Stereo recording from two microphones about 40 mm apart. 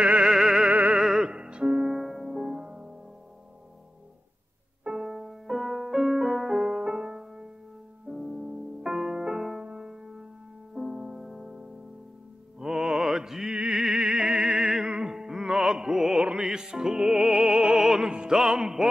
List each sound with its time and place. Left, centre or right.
0.0 s music: right
0.3 s music: centre
0.7 s music: right
1.2 s music: right
1.9 s music: centre
2.2 s music: centre
4.9 s music: centre
6.6 s music: right
8.1 s music: right
8.8 s music: centre
12.5 s music: centre